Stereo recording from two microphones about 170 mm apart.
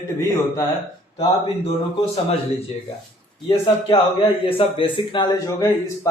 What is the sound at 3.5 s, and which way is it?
A man's voice, 35° left (ahead or behind).